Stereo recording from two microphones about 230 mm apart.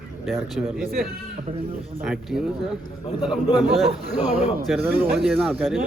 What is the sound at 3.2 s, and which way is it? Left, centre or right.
Speech, centre.